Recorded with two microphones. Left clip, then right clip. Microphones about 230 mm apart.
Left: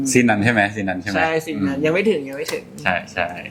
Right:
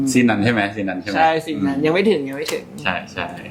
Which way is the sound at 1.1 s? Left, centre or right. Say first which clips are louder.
Right 4 dB; centre.